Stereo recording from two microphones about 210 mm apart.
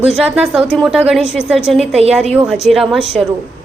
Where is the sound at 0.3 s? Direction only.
5° right (ahead or behind).